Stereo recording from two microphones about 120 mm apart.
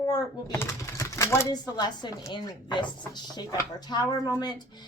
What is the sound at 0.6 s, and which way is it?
Speech, 25° left (ahead or behind).